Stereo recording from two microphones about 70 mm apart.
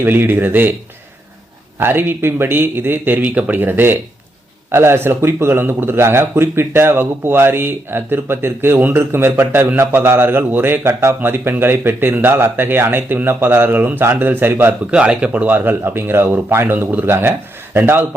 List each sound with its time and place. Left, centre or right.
0.0 s speech: right
1.8 s a man's voice: right
14.8 s a man's voice: centre